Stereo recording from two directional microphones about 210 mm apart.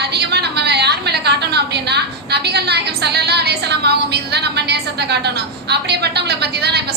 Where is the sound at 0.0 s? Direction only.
50° right (ahead or behind).